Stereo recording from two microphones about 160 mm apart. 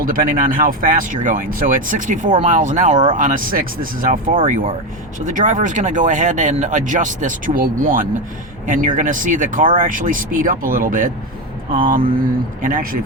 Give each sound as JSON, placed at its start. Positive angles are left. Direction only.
{"t": 0.0, "sound": "speech", "side_deg": -60}